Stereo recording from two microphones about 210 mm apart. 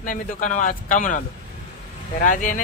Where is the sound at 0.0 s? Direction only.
40° left (ahead or behind).